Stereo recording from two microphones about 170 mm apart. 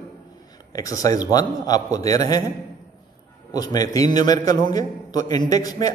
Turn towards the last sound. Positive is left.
turn(degrees=20)  # may be behind; listen again after turning